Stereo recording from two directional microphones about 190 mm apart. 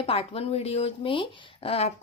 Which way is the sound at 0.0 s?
30° left (ahead or behind).